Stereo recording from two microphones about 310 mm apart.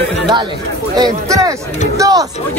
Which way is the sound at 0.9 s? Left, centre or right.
Centre.